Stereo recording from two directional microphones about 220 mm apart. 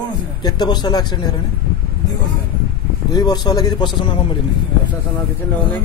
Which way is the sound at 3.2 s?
15° left (ahead or behind).